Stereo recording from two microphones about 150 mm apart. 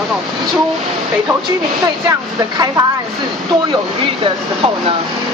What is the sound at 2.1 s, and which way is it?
Speech, 25° right (ahead or behind).